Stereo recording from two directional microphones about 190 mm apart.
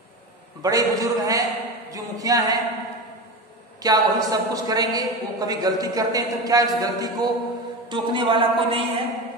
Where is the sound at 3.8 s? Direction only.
20° right (ahead or behind).